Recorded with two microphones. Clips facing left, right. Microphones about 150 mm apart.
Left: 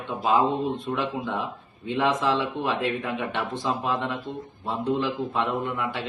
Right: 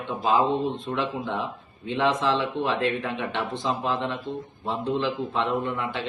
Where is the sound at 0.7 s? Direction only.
Centre (ahead or behind).